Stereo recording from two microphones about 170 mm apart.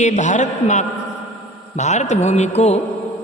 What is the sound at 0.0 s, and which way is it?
A man's voice, 45° left (ahead or behind).